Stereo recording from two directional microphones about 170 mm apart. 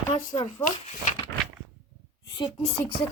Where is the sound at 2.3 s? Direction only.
25° left (ahead or behind).